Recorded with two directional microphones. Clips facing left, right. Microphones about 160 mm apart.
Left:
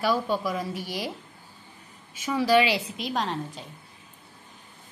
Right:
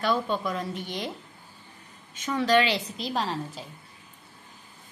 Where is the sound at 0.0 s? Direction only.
5° left (ahead or behind).